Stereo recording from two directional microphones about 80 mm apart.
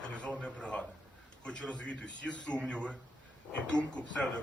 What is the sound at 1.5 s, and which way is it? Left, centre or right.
Speech, centre.